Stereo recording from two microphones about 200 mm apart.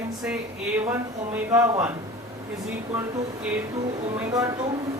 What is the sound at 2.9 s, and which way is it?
Speech, 10° right (ahead or behind).